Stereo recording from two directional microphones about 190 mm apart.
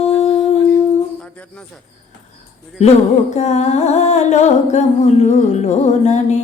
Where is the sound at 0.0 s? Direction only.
30° left (ahead or behind).